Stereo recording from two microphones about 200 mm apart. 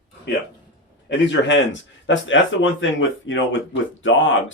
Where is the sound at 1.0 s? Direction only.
65° left (ahead or behind).